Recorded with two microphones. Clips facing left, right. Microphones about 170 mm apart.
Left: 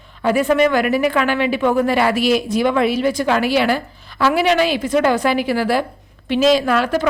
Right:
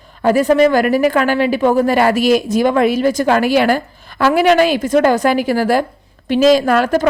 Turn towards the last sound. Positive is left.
turn(degrees=-45)  # may be behind; listen again after turning